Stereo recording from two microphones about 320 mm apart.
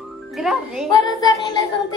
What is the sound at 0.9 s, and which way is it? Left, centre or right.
Child singing, centre.